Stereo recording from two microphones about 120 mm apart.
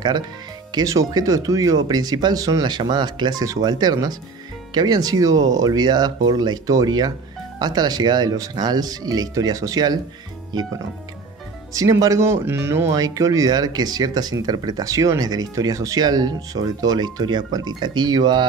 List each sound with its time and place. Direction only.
0.7 s speech: 30° right (ahead or behind)
11.7 s speech: 30° right (ahead or behind)